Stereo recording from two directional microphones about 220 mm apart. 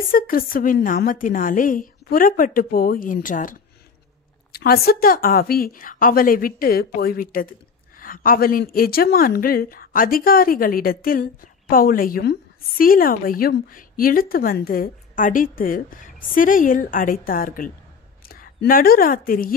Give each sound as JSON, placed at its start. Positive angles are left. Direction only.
{"t": 0.1, "sound": "a woman's voice", "side_deg": 40}